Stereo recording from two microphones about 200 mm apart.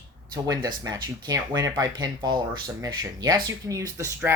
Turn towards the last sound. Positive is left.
turn(degrees=-15)  # may be behind; listen again after turning